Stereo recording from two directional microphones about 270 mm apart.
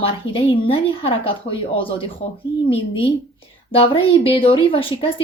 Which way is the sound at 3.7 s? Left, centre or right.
Centre.